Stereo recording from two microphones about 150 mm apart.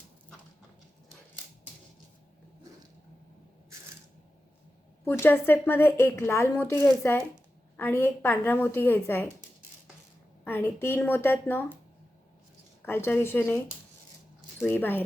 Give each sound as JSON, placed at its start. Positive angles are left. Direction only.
{"t": 5.0, "sound": "a woman's voice", "side_deg": 15}
{"t": 10.4, "sound": "a woman's voice", "side_deg": 15}
{"t": 12.8, "sound": "a woman's voice", "side_deg": 15}
{"t": 14.6, "sound": "a woman's voice", "side_deg": 15}